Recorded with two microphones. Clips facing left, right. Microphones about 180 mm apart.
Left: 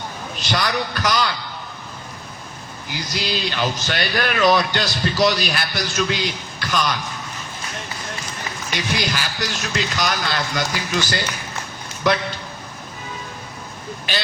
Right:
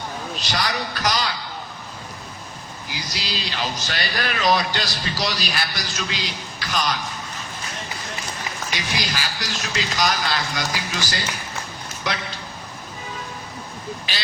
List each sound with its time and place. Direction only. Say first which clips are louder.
0.3 s a man's voice: left 4 dB; 55° left (ahead or behind)
2.9 s speech: left 6 dB; 55° left (ahead or behind)
8.7 s speech: left 5 dB; 55° left (ahead or behind)